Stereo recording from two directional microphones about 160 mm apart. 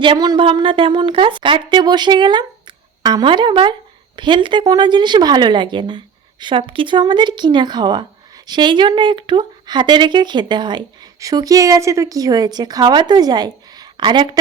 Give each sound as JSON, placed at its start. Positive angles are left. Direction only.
{"t": 0.0, "sound": "speech", "side_deg": -30}